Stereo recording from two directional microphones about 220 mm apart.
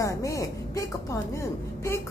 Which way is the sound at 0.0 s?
15° left (ahead or behind).